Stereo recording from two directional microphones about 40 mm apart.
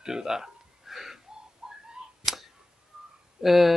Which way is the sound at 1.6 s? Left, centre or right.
Centre.